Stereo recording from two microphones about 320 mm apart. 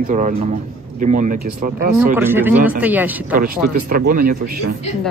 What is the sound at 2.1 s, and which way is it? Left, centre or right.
Speech, centre.